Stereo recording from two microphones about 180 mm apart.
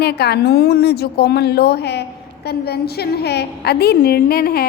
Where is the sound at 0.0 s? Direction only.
65° left (ahead or behind).